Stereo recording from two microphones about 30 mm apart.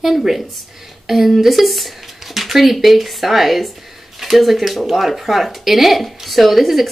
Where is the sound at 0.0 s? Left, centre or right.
Centre.